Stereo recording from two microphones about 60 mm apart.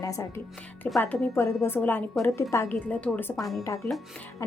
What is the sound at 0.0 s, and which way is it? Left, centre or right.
Speech, left.